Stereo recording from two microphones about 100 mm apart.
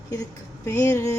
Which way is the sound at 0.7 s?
25° left (ahead or behind).